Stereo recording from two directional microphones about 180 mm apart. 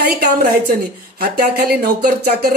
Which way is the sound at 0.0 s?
60° right (ahead or behind).